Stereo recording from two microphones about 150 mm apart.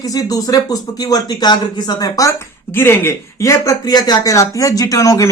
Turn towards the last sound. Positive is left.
turn(degrees=20)  # may be behind; listen again after turning